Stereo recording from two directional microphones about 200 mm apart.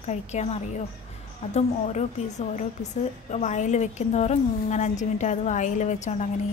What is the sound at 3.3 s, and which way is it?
A woman's voice, 35° left (ahead or behind).